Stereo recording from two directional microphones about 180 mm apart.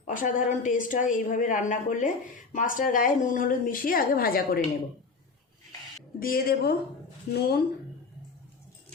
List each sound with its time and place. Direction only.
0.1 s a woman's voice: 45° left (ahead or behind)
6.1 s a woman's voice: 55° left (ahead or behind)